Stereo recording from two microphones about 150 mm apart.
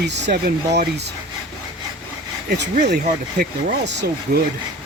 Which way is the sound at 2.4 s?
90° right.